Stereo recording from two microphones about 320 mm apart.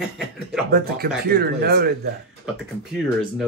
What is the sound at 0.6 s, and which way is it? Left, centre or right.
Speech, right.